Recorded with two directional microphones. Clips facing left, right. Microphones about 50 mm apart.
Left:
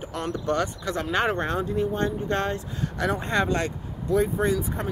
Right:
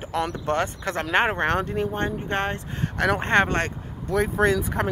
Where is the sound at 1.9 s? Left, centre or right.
Right.